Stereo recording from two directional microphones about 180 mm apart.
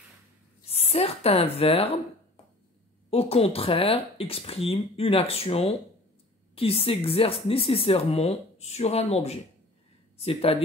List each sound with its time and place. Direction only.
0.7 s speech: 35° left (ahead or behind)
3.1 s speech: 35° left (ahead or behind)